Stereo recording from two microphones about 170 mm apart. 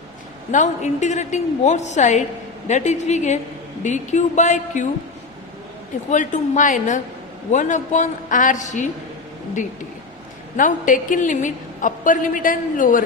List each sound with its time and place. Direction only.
0.5 s a woman's voice: 45° left (ahead or behind)
6.1 s a woman's voice: 45° left (ahead or behind)
10.6 s a woman's voice: 50° left (ahead or behind)